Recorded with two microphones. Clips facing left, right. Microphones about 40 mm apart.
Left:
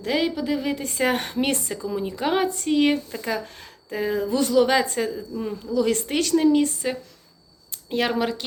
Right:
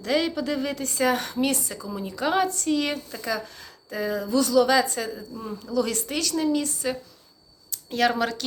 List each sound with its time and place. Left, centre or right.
0.0 s a woman's voice: centre